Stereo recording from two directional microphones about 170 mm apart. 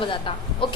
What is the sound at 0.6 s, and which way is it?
Chicken, 30° left (ahead or behind).